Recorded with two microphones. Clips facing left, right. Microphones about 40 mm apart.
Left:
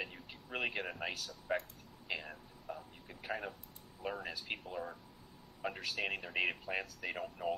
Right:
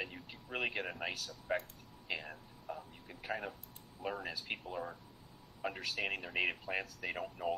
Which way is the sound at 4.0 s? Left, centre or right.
Centre.